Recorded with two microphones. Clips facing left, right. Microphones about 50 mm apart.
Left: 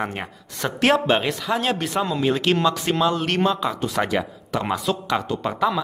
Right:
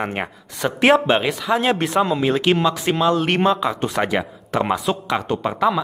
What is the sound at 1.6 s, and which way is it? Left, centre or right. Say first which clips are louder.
Speech: right 4 dB; right.